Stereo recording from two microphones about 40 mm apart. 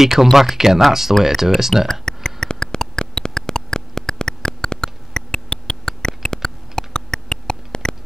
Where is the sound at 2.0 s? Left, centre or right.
Centre.